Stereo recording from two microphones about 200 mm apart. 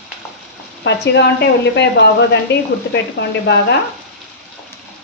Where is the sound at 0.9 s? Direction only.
60° left (ahead or behind).